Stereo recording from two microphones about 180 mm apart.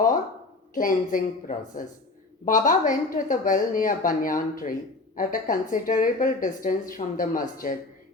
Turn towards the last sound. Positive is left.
turn(degrees=50)  # may be behind; listen again after turning